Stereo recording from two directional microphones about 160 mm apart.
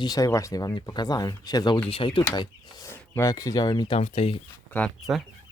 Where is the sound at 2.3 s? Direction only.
20° left (ahead or behind).